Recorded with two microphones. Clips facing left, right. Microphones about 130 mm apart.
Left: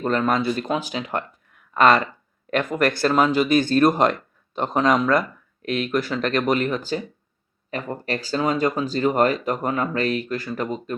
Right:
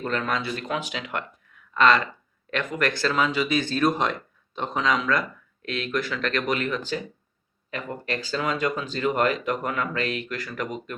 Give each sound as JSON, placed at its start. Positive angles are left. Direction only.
{"t": 0.0, "sound": "speech", "side_deg": 40}
{"t": 1.5, "sound": "a sound", "side_deg": 45}
{"t": 2.5, "sound": "speech", "side_deg": 45}